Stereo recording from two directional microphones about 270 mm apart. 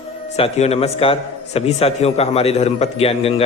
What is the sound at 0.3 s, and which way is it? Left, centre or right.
A man's voice, left.